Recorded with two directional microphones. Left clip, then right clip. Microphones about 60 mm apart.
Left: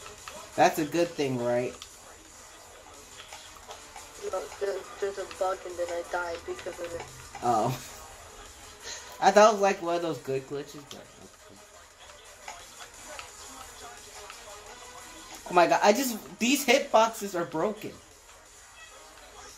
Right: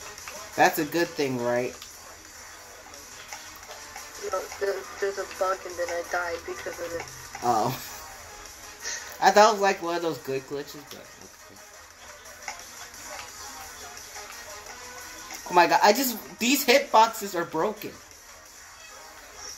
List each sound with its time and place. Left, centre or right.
0.6 s speech: left
4.2 s speech: centre
7.4 s speech: left
9.2 s speech: left
15.5 s speech: left
17.6 s speech: left